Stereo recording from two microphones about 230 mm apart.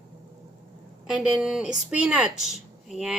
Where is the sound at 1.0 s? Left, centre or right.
Centre.